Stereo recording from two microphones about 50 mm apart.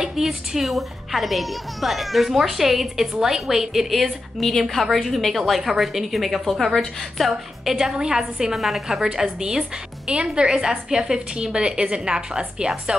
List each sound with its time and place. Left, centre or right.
0.0 s a woman's voice: centre